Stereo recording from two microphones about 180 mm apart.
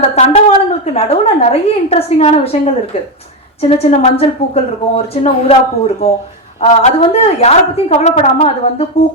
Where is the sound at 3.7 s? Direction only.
35° left (ahead or behind).